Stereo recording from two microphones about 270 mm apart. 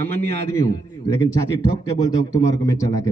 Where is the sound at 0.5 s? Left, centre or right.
Centre.